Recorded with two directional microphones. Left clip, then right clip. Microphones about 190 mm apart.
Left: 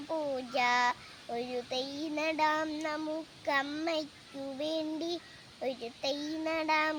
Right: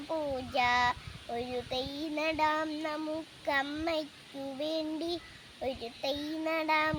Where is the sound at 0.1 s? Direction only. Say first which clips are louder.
Even; 5° left (ahead or behind).